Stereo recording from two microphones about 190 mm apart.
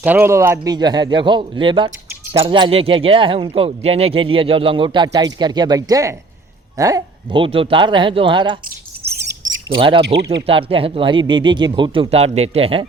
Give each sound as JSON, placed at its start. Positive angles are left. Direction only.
{"t": 0.0, "sound": "speech", "side_deg": -10}
{"t": 9.6, "sound": "speech", "side_deg": -25}
{"t": 10.0, "sound": "speech", "side_deg": -60}
{"t": 10.4, "sound": "speech", "side_deg": -30}